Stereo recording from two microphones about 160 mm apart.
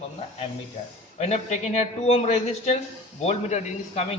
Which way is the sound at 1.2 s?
45° left (ahead or behind).